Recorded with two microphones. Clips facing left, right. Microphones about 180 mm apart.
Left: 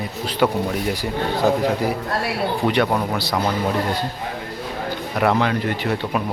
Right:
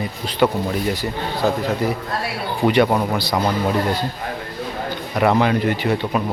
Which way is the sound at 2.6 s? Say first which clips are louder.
Right 5 dB; 5° right (ahead or behind).